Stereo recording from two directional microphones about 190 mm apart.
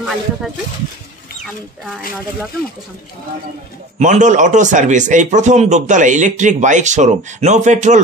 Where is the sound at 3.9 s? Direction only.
40° right (ahead or behind).